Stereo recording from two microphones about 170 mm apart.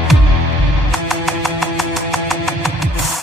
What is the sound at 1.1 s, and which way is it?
Music, centre (ahead or behind).